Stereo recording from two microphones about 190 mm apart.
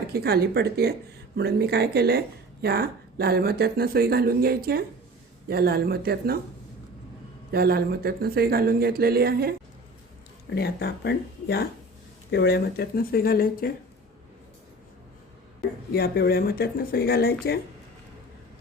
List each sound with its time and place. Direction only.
0.1 s speech: 55° right (ahead or behind)
7.5 s speech: 55° right (ahead or behind)
10.5 s speech: 60° left (ahead or behind)
15.9 s speech: 55° left (ahead or behind)